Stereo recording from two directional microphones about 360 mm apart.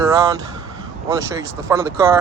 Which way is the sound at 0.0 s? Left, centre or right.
Centre.